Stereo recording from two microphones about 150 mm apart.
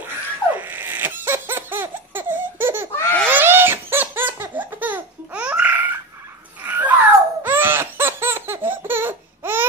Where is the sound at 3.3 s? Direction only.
15° right (ahead or behind).